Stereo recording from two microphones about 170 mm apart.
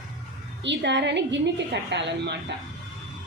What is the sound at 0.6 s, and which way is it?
A woman's voice, 90° right.